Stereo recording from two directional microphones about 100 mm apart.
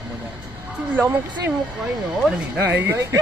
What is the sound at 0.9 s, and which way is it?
Speech, 15° right (ahead or behind).